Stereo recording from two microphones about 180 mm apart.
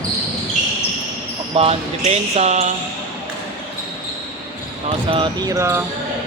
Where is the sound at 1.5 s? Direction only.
35° right (ahead or behind).